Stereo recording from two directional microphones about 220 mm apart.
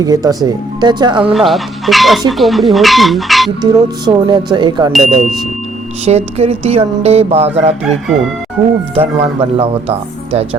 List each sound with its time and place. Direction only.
0.0 s speech: 15° right (ahead or behind)
1.3 s speech: centre (ahead or behind)
3.6 s speech: 20° right (ahead or behind)
4.9 s speech: centre (ahead or behind)
6.1 s speech: 30° right (ahead or behind)
9.0 s speech: 25° right (ahead or behind)